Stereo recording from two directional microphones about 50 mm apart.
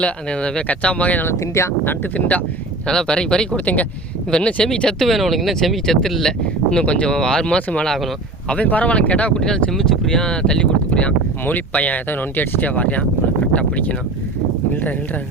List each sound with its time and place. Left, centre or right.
0.0 s speech: left
1.4 s speech: left
2.1 s speech: left
2.8 s speech: centre
4.9 s speech: centre
6.7 s speech: centre
9.4 s speech: centre
11.4 s speech: left